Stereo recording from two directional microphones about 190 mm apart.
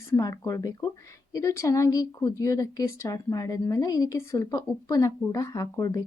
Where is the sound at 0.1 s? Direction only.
15° left (ahead or behind).